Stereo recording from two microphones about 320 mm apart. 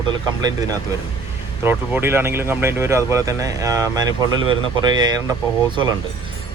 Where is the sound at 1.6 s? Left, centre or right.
Centre.